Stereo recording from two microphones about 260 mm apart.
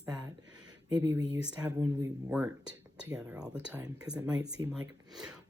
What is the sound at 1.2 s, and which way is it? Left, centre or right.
Speech, left.